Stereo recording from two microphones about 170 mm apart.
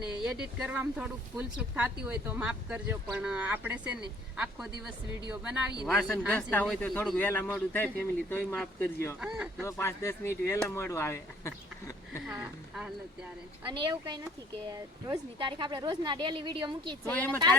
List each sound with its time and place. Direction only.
0.1 s speech: 5° right (ahead or behind)
5.3 s speech: 5° right (ahead or behind); by 9.1 s 15° left (ahead or behind)
9.2 s speech: 5° right (ahead or behind)
9.6 s speech: 15° left (ahead or behind)
12.3 s speech: 5° right (ahead or behind)
13.7 s speech: 25° right (ahead or behind)
17.1 s speech: 10° left (ahead or behind)